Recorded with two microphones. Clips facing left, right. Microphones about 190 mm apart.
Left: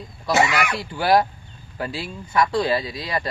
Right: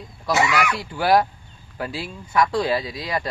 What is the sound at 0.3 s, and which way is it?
Speech, 25° left (ahead or behind).